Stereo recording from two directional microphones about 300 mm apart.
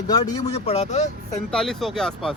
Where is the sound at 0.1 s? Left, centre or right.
Centre.